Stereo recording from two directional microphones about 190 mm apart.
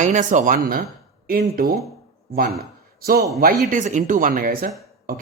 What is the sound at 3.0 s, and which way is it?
Speech, 55° right (ahead or behind).